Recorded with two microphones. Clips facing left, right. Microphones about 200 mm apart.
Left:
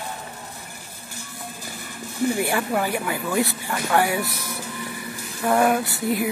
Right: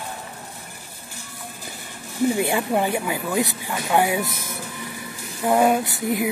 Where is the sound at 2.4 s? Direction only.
20° right (ahead or behind).